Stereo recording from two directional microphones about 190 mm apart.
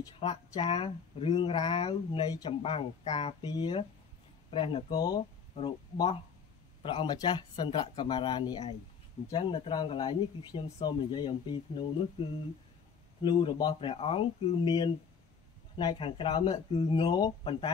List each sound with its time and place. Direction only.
0.2 s speech: 25° left (ahead or behind)